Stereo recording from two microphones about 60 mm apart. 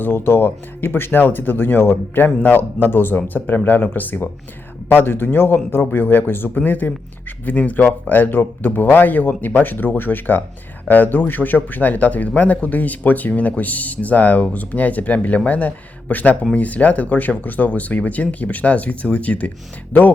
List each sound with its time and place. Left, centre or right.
0.0 s speech: left